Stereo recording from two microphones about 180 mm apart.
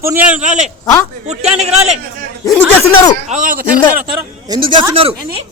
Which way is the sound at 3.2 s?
45° right (ahead or behind).